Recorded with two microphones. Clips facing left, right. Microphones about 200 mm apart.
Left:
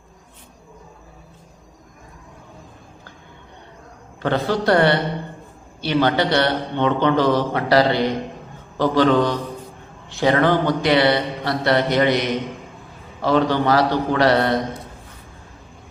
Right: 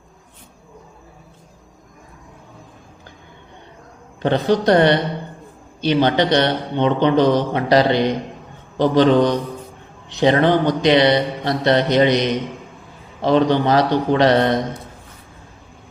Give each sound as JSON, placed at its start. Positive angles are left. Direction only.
{"t": 4.2, "sound": "a man's voice", "side_deg": -20}